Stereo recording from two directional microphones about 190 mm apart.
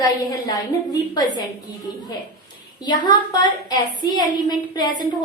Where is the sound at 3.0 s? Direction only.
20° left (ahead or behind).